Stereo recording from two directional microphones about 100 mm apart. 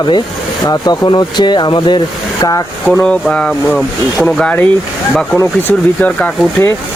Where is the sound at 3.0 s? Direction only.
10° left (ahead or behind).